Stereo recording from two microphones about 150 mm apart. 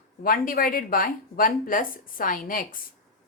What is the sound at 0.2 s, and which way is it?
Speech, 70° left (ahead or behind).